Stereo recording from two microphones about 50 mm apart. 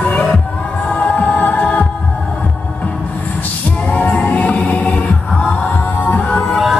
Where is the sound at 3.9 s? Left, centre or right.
Left.